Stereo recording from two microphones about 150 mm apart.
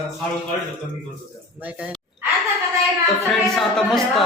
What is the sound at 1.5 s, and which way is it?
Speech, 10° right (ahead or behind).